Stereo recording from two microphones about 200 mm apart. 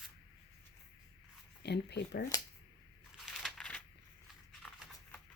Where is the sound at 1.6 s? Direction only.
55° left (ahead or behind).